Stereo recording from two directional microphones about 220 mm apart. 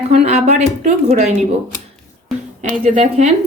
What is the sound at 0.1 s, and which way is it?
Speech, 30° right (ahead or behind).